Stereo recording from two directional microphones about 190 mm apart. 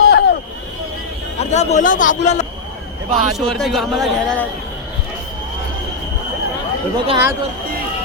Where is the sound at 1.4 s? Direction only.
35° left (ahead or behind).